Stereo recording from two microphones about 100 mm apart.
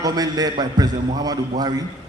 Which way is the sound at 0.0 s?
40° right (ahead or behind).